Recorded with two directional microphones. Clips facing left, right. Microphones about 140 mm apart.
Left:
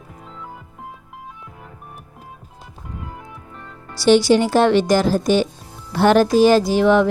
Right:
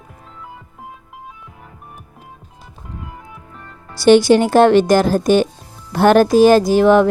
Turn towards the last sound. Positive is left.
turn(degrees=-45)  # may be behind; listen again after turning